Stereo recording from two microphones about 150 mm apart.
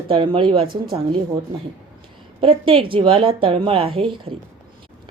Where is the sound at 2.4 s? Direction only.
35° right (ahead or behind).